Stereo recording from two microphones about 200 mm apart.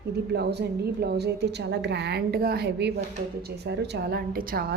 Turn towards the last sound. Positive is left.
turn(degrees=-50)  # may be behind; listen again after turning